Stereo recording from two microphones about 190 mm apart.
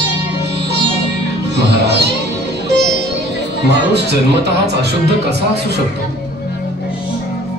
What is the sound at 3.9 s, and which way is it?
A man's voice, 60° right (ahead or behind).